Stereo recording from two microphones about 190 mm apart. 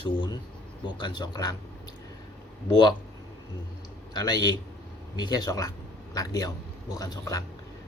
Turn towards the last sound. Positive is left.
turn(degrees=20)  # may be behind; listen again after turning